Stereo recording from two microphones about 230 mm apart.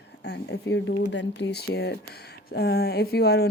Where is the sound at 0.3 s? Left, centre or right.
Left.